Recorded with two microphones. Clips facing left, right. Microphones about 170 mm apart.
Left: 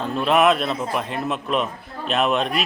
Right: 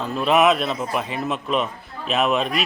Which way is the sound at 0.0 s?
Centre (ahead or behind).